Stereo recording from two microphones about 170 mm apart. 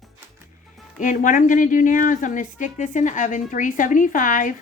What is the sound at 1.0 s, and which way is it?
A woman's voice, 50° left (ahead or behind).